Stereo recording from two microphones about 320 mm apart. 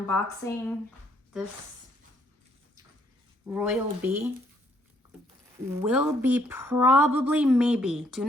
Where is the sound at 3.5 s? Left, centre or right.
Centre.